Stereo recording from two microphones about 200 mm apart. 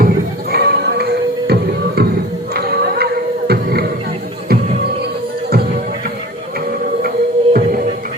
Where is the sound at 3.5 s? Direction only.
50° right (ahead or behind).